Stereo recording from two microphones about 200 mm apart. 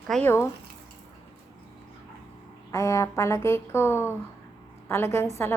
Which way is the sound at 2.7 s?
15° left (ahead or behind).